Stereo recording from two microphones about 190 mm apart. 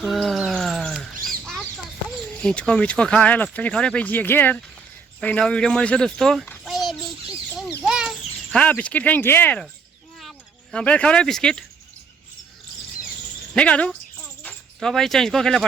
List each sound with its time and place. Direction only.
0.0 s chirp: centre (ahead or behind)
1.1 s chicken: 45° right (ahead or behind)
2.4 s a child's voice: 5° left (ahead or behind)
7.9 s a sound: 5° right (ahead or behind)
8.5 s speech: 5° left (ahead or behind)
13.5 s cricket: 5° left (ahead or behind)